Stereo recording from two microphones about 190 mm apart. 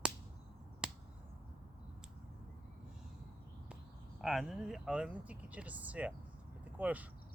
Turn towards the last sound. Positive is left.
turn(degrees=-10)  # may be behind; listen again after turning